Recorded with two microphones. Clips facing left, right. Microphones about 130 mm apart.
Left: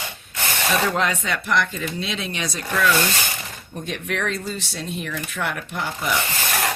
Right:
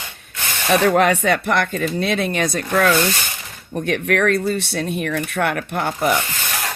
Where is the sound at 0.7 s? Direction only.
65° right (ahead or behind).